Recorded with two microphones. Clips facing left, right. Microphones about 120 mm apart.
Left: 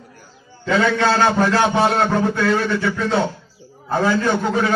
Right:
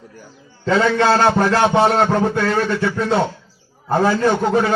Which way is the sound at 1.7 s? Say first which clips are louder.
Right 2 dB; 30° right (ahead or behind).